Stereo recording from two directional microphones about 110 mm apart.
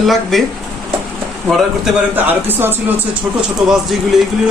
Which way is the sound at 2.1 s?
20° right (ahead or behind).